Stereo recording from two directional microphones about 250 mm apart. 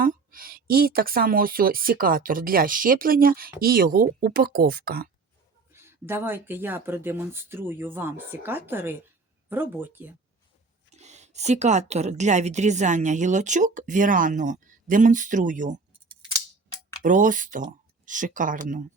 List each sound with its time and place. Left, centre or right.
0.0 s speech: right
5.7 s speech: centre
10.9 s speech: right
17.0 s speech: right